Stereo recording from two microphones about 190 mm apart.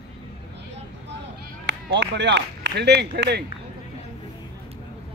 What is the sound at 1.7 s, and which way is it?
Speech, 65° right (ahead or behind).